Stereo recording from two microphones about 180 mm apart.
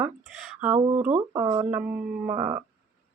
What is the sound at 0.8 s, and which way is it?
Speech, 35° right (ahead or behind).